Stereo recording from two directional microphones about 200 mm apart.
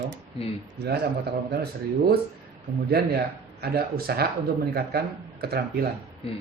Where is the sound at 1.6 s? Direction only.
50° right (ahead or behind).